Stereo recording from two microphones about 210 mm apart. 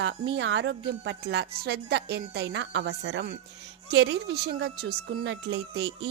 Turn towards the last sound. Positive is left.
turn(degrees=-55)  # may be behind; listen again after turning